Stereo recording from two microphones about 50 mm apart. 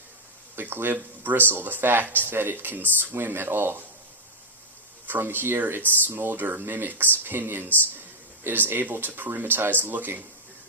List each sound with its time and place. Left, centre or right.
0.5 s speech: right
5.0 s speech: right